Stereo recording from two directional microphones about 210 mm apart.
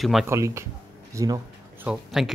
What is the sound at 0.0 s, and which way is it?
Speech, centre (ahead or behind).